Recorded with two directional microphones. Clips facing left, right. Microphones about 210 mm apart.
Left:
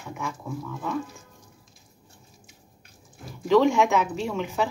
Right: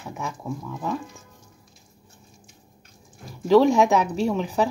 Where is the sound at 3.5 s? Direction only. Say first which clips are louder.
Right 3 dB; 35° right (ahead or behind).